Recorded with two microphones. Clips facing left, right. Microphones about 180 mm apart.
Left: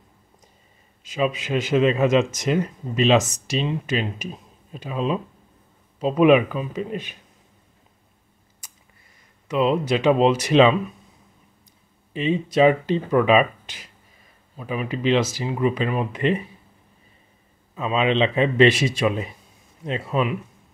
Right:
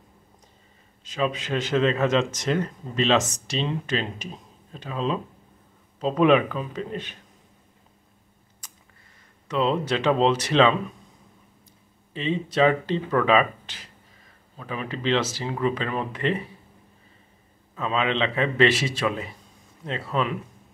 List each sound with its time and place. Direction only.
1.0 s speech: 10° left (ahead or behind)
8.6 s computer keyboard: 10° left (ahead or behind)
9.5 s speech: 10° left (ahead or behind)
12.1 s speech: 15° left (ahead or behind)
17.7 s speech: 15° left (ahead or behind)